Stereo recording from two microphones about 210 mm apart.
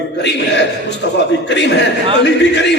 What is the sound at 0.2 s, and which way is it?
A man's voice, 55° left (ahead or behind).